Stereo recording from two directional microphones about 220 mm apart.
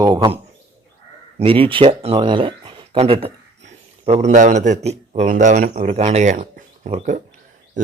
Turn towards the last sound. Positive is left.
turn(degrees=-35)  # may be behind; listen again after turning